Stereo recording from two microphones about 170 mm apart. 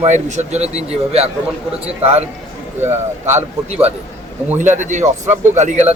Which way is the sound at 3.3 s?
40° right (ahead or behind).